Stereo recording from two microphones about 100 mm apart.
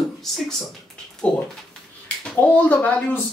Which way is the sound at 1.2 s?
15° left (ahead or behind).